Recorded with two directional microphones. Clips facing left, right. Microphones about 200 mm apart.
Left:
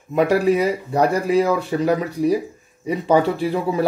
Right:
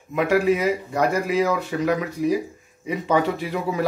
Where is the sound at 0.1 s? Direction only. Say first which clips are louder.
Left 3 dB; 35° left (ahead or behind).